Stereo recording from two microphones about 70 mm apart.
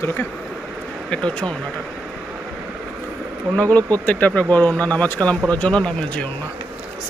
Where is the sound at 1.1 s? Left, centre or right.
Centre.